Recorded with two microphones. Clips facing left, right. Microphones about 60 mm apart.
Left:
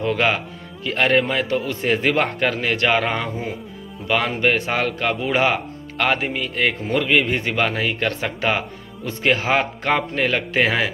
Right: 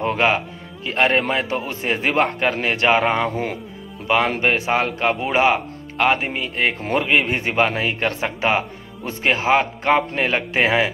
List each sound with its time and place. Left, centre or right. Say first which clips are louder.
0.0 s a man's voice: right 1 dB; right
0.8 s a man's voice: even; centre
4.4 s a man's voice: right 1 dB; centre